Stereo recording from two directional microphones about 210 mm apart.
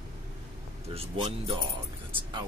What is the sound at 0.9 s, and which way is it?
Speech, 25° right (ahead or behind).